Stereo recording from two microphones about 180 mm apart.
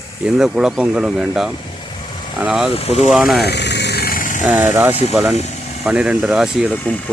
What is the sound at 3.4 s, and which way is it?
Vehicle, 70° left (ahead or behind).